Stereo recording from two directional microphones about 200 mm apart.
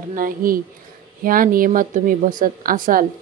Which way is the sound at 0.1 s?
45° right (ahead or behind).